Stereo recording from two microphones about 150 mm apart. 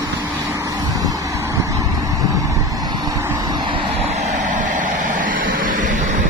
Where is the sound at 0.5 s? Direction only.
20° right (ahead or behind).